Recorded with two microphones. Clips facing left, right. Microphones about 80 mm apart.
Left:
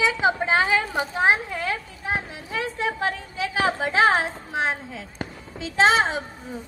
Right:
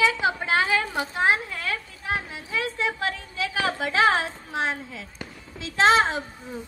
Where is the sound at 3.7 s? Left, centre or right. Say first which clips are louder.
Left 2 dB; left.